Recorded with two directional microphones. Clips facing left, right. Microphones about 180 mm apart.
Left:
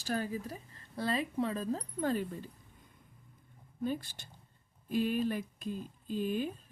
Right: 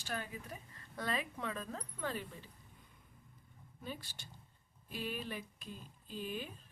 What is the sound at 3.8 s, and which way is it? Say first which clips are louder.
Speech: left 11 dB; 50° left (ahead or behind).